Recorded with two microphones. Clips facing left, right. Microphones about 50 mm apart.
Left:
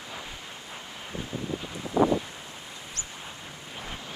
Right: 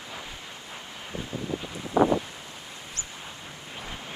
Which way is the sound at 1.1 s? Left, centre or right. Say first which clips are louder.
Right 1 dB; right.